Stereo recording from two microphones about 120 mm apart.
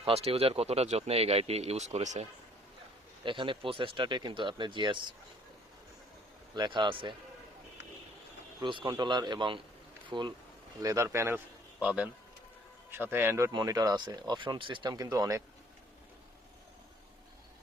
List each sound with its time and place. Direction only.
0.0 s speech: 55° right (ahead or behind); by 2.2 s 70° right (ahead or behind)
3.2 s speech: 45° right (ahead or behind)
6.5 s speech: 40° right (ahead or behind)
8.6 s speech: 40° right (ahead or behind)
10.8 s a man's voice: 25° right (ahead or behind)
11.8 s a man's voice: 10° right (ahead or behind)
13.5 s speech: 35° right (ahead or behind)
14.9 s a man's voice: 30° right (ahead or behind)